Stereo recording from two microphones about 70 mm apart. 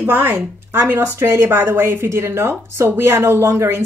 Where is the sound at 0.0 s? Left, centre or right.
Right.